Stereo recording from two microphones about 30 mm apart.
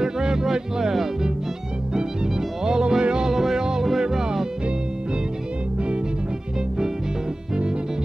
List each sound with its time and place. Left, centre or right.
0.0 s music: right
2.6 s music: right
3.3 s music: centre